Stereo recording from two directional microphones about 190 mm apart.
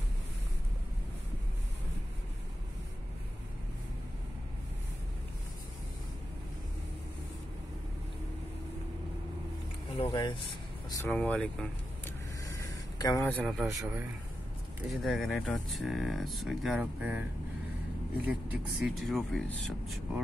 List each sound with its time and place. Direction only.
9.9 s speech: 25° left (ahead or behind)
11.1 s speech: 5° left (ahead or behind)
12.4 s a sound: 15° left (ahead or behind)
13.4 s speech: 5° right (ahead or behind)
13.7 s a man's voice: 15° right (ahead or behind)
14.9 s speech: centre (ahead or behind)
18.2 s speech: 5° right (ahead or behind)